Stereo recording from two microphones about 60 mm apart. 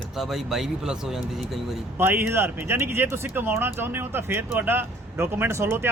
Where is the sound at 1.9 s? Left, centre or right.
Right.